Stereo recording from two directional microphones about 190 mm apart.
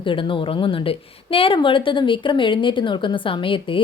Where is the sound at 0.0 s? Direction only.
25° left (ahead or behind).